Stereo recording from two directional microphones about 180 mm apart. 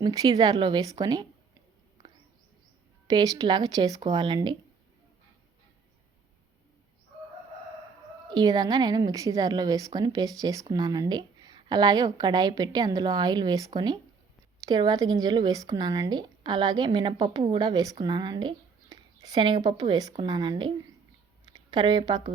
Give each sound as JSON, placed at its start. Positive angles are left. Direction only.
{"t": 0.0, "sound": "speech", "side_deg": -20}
{"t": 3.1, "sound": "speech", "side_deg": -25}
{"t": 8.3, "sound": "speech", "side_deg": -25}